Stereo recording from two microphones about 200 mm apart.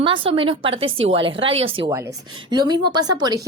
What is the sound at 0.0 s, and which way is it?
Speech, 25° right (ahead or behind).